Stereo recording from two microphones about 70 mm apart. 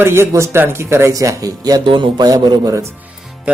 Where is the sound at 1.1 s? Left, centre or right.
Right.